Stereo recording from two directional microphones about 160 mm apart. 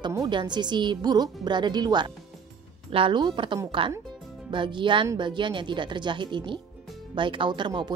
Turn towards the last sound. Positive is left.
turn(degrees=-30)  # may be behind; listen again after turning